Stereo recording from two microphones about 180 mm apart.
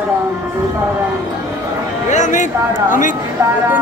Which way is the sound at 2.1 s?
45° left (ahead or behind).